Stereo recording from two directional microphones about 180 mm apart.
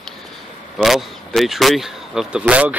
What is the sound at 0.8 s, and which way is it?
Speech, centre (ahead or behind).